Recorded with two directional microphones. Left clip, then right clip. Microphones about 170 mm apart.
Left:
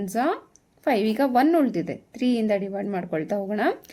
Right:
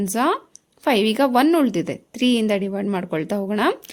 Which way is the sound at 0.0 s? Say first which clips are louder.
Right 4 dB; 35° right (ahead or behind).